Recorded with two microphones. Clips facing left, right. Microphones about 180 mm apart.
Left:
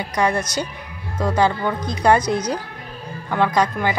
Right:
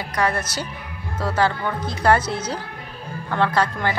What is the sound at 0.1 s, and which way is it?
A woman's voice, 20° left (ahead or behind).